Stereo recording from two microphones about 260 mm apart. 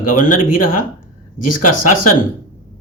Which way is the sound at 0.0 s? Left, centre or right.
Left.